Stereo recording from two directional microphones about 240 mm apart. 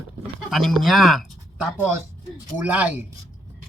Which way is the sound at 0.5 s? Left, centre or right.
Centre.